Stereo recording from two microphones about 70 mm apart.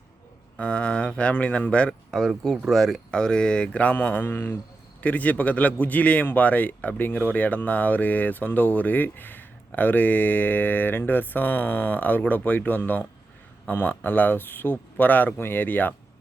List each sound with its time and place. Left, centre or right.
0.5 s speech: centre
1.9 s a man's voice: centre; by 16.0 s left